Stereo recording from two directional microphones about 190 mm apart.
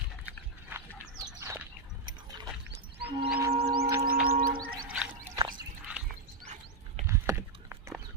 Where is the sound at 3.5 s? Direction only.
55° right (ahead or behind).